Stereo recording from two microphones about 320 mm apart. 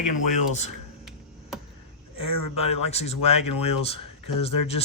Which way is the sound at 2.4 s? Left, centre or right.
Left.